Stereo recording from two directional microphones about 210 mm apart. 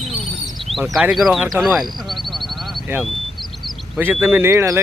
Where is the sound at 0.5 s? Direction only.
Centre (ahead or behind).